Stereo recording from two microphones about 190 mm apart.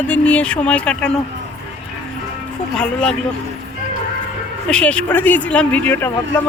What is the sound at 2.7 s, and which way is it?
Speech, 5° left (ahead or behind).